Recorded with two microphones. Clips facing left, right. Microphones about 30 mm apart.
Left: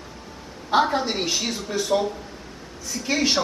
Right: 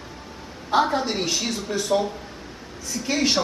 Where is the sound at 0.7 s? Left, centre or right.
Centre.